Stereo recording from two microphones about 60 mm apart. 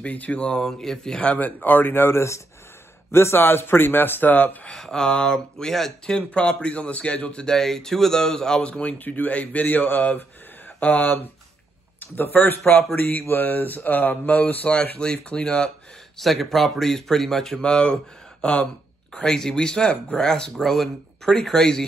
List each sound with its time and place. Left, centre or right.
0.0 s speech: left
1.2 s a man's voice: left
4.6 s speech: centre
7.5 s a man's voice: centre
16.2 s speech: centre